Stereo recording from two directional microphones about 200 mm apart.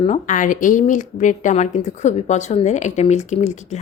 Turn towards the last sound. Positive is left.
turn(degrees=35)  # may be behind; listen again after turning